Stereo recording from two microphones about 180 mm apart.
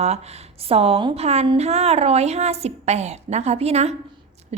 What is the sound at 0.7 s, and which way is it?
A woman's voice, 35° right (ahead or behind).